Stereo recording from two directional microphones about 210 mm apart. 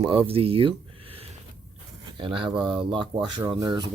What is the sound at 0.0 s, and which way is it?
Speech, 25° right (ahead or behind).